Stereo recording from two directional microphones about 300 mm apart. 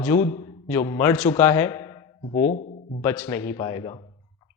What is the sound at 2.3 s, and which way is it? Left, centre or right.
Speech, left.